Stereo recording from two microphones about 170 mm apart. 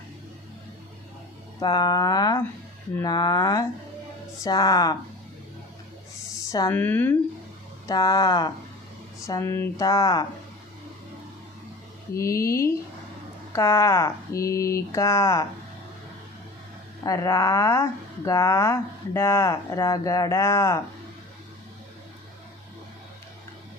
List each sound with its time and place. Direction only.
1.5 s speech: 25° left (ahead or behind)
6.5 s speech: 15° left (ahead or behind)
12.1 s speech: 20° left (ahead or behind)
17.0 s speech: 20° left (ahead or behind)